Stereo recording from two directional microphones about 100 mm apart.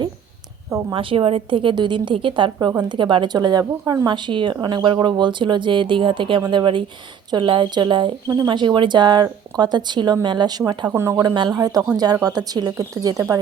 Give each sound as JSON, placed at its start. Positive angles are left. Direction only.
{"t": 0.7, "sound": "speech", "side_deg": -35}
{"t": 0.9, "sound": "a woman's voice", "side_deg": -60}
{"t": 3.6, "sound": "speech", "side_deg": -30}
{"t": 4.0, "sound": "a woman's voice", "side_deg": -55}
{"t": 8.3, "sound": "a woman's voice", "side_deg": -45}
{"t": 10.9, "sound": "speech", "side_deg": -30}